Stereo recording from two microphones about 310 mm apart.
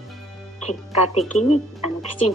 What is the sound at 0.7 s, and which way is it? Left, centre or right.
Speech, left.